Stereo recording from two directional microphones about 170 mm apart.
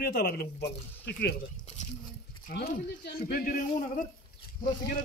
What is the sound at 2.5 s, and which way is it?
A man's voice, 70° left (ahead or behind).